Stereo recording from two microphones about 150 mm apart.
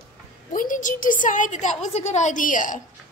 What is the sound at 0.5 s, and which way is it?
A woman's voice, 65° left (ahead or behind).